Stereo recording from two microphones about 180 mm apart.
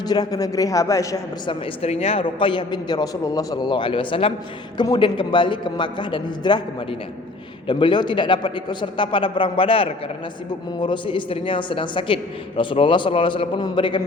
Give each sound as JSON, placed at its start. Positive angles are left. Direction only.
{"t": 0.1, "sound": "a man's voice", "side_deg": 20}
{"t": 1.8, "sound": "a man's voice", "side_deg": 35}